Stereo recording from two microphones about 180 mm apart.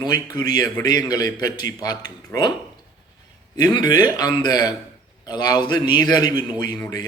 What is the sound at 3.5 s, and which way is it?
A man's voice, 20° left (ahead or behind).